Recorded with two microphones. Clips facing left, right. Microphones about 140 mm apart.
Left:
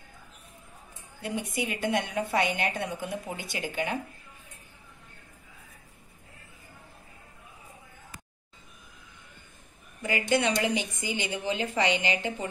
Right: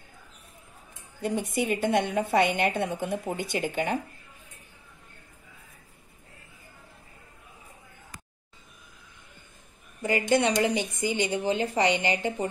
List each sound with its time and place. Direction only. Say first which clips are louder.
1.6 s speech: right 4 dB; 50° right (ahead or behind)
10.1 s a woman's voice: right 3 dB; 35° right (ahead or behind)